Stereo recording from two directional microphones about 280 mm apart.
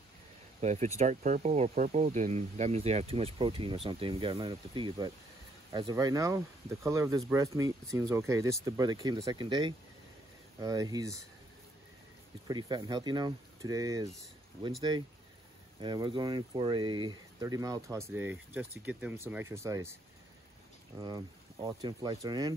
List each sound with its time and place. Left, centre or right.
0.6 s speech: right
12.4 s speech: centre
21.0 s speech: centre